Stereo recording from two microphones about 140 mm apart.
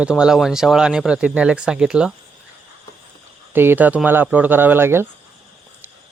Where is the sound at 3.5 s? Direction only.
15° right (ahead or behind).